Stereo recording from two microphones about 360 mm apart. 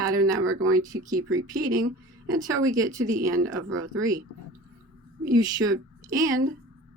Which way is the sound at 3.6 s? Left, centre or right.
Right.